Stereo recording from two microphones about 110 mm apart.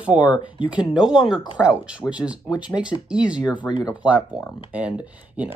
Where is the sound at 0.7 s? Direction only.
5° right (ahead or behind).